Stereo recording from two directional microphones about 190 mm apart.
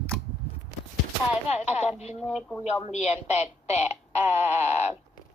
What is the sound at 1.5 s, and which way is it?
Speech, 35° left (ahead or behind).